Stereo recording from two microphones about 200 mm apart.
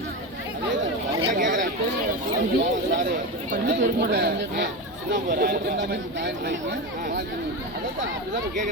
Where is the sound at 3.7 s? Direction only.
55° right (ahead or behind).